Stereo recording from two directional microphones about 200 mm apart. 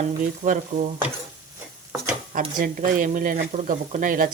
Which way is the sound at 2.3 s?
45° right (ahead or behind).